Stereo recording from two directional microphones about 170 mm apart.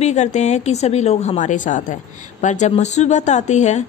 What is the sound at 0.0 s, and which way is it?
A woman's voice, 40° left (ahead or behind).